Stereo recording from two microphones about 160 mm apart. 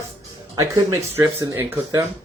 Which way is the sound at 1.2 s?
20° right (ahead or behind).